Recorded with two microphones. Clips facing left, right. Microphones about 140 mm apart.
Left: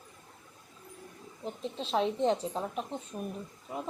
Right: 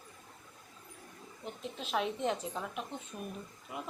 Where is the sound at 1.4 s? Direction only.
30° left (ahead or behind).